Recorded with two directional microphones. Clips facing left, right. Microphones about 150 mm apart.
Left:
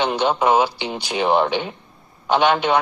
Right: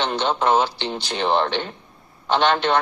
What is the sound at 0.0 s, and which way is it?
Speech, 10° left (ahead or behind).